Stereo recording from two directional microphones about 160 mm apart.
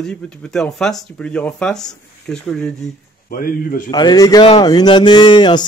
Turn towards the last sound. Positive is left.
turn(degrees=30)  # may be behind; listen again after turning